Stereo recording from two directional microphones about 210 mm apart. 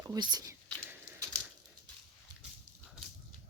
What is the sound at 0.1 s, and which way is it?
Whispering, 20° right (ahead or behind).